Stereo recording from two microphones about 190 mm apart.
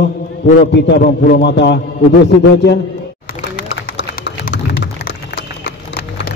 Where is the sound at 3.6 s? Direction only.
70° left (ahead or behind).